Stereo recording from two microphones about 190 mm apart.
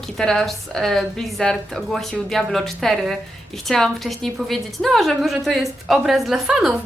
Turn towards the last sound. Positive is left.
turn(degrees=-5)  # may be behind; listen again after turning